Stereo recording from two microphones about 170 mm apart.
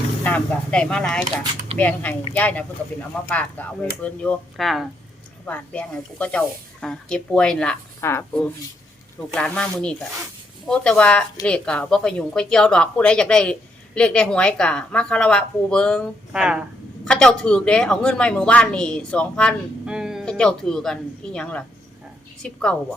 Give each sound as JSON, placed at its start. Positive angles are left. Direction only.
{"t": 0.3, "sound": "a woman's voice", "side_deg": 5}
{"t": 1.2, "sound": "speech", "side_deg": -40}
{"t": 1.8, "sound": "a woman's voice", "side_deg": 10}
{"t": 17.1, "sound": "a woman's voice", "side_deg": 5}
{"t": 19.8, "sound": "a woman's voice", "side_deg": -5}